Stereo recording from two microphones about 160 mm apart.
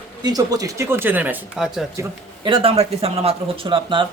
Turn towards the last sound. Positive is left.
turn(degrees=-30)  # may be behind; listen again after turning